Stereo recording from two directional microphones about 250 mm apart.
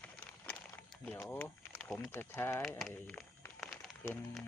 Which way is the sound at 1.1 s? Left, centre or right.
Centre.